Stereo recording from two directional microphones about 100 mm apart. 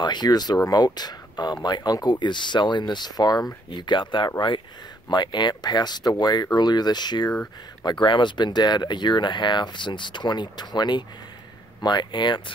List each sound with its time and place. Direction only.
0.0 s speech: 45° left (ahead or behind)